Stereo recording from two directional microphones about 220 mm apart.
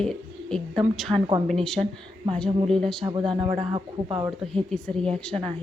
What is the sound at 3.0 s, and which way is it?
Speech, 20° right (ahead or behind).